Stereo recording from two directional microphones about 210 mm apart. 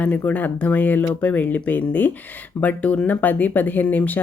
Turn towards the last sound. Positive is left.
turn(degrees=10)  # may be behind; listen again after turning